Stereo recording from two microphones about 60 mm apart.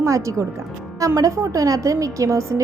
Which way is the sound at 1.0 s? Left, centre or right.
Right.